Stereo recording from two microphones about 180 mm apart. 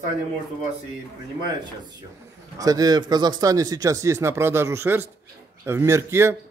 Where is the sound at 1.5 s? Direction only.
25° right (ahead or behind).